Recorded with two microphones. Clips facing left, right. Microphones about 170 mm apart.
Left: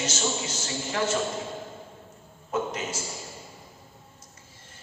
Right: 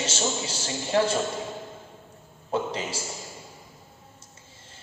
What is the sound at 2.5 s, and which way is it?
Speech, 30° right (ahead or behind).